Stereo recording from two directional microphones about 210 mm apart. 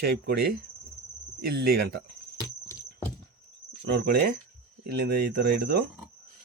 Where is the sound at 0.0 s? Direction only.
50° right (ahead or behind).